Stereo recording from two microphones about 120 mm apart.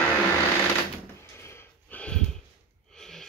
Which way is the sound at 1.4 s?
20° left (ahead or behind).